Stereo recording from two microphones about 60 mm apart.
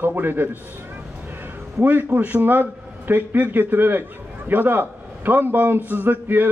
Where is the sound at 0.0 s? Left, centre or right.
Right.